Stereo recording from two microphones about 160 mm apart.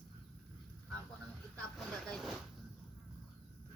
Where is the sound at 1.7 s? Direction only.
Centre (ahead or behind).